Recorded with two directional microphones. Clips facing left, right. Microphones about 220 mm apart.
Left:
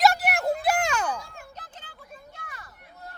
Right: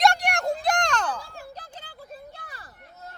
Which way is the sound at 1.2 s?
35° right (ahead or behind).